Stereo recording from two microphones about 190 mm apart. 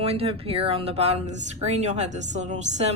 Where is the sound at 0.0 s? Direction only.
30° right (ahead or behind).